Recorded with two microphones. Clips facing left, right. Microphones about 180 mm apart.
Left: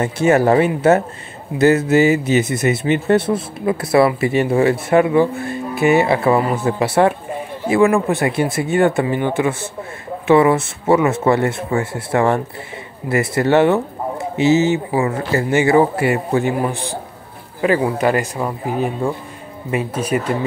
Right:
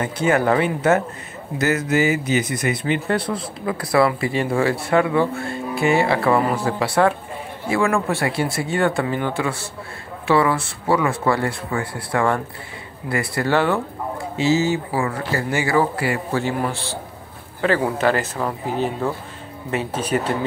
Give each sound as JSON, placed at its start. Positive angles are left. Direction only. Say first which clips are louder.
{"t": 0.0, "sound": "speech", "louder": "left 5 dB", "side_deg": 25}